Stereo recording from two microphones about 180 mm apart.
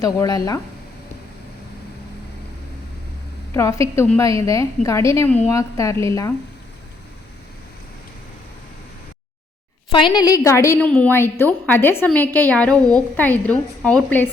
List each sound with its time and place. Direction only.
0.0 s speech: 20° left (ahead or behind)
3.5 s a woman's voice: 15° left (ahead or behind)
9.9 s a woman's voice: 25° left (ahead or behind); by 14.3 s 10° left (ahead or behind)